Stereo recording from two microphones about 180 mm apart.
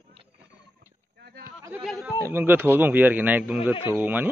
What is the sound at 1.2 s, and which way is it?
Sheep, 65° right (ahead or behind).